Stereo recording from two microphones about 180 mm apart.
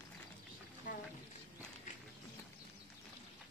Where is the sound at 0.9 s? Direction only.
50° left (ahead or behind).